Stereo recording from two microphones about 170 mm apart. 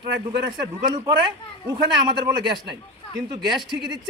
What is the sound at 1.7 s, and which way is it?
A man's voice, 25° right (ahead or behind).